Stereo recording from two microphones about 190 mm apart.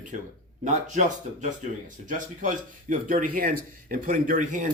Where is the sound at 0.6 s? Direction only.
40° right (ahead or behind).